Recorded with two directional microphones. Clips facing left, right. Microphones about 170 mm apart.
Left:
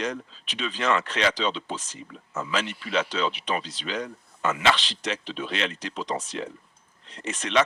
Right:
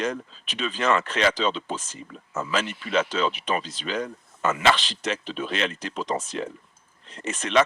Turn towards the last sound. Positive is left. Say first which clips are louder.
# right 2 dB
turn(degrees=-45)  # may be behind; listen again after turning